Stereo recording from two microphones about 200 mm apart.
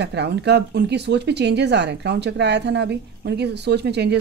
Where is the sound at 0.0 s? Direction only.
55° right (ahead or behind).